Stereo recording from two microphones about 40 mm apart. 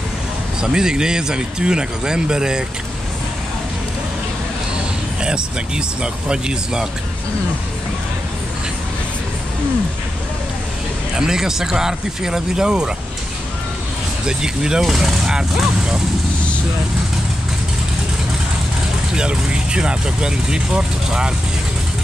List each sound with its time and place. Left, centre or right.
0.6 s speech: centre
5.2 s speech: right
11.1 s speech: centre
14.2 s speech: centre
19.1 s speech: right